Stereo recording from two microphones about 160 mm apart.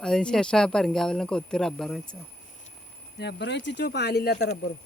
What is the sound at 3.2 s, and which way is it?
Speech, 90° left.